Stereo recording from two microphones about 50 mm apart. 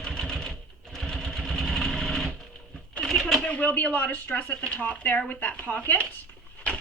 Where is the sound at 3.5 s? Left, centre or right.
Left.